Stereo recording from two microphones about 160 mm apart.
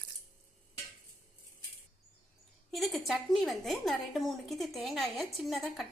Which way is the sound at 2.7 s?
Centre (ahead or behind).